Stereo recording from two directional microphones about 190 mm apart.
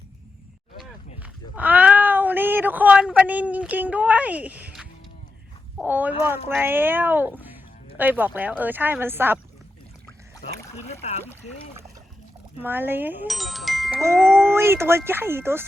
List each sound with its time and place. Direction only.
0.8 s a sound: 5° right (ahead or behind)
5.7 s speech: 10° right (ahead or behind)
10.8 s speech: 35° left (ahead or behind)
12.6 s speech: 10° right (ahead or behind)
13.2 s speech: centre (ahead or behind)
14.5 s speech: 15° right (ahead or behind)